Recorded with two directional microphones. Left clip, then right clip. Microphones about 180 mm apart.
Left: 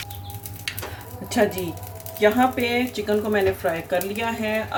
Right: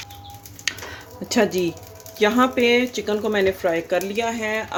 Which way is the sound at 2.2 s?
55° right (ahead or behind).